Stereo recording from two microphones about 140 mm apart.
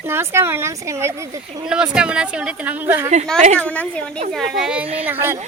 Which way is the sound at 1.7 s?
5° right (ahead or behind).